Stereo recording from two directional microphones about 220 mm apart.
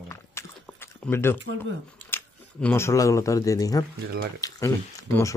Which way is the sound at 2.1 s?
10° left (ahead or behind).